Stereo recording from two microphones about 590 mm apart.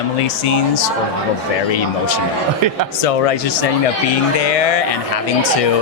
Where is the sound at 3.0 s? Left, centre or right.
Left.